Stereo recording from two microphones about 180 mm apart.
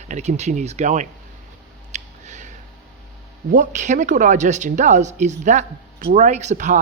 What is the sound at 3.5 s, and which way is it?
A woman's voice, 45° right (ahead or behind).